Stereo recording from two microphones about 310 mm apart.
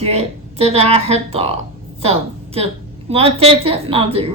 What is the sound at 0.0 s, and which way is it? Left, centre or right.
A woman's voice, centre.